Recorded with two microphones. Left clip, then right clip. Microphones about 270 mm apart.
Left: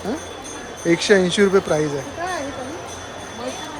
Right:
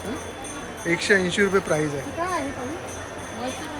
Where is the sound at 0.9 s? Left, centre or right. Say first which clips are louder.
Left 5 dB; centre.